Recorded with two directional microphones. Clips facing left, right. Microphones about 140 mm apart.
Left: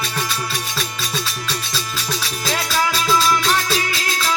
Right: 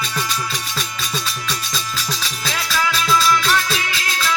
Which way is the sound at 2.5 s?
40° left (ahead or behind).